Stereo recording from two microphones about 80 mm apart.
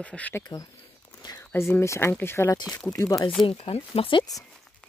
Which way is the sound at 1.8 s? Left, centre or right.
Left.